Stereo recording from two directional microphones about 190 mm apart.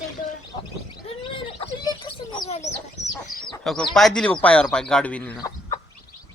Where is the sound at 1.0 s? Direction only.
25° left (ahead or behind).